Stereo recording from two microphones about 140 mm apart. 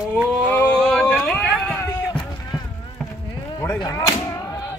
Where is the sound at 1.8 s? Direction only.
20° left (ahead or behind).